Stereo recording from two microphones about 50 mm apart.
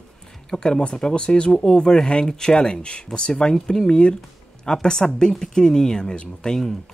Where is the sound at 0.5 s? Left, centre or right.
Centre.